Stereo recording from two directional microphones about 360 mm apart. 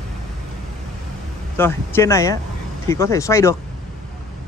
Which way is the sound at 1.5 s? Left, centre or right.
Centre.